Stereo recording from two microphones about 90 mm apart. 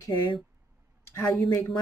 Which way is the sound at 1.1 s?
30° left (ahead or behind).